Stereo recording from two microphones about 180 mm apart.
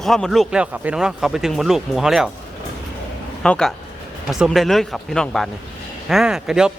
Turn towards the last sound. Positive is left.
turn(degrees=-5)  # may be behind; listen again after turning